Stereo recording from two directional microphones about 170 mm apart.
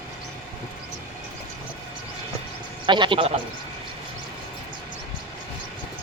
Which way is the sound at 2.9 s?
30° right (ahead or behind).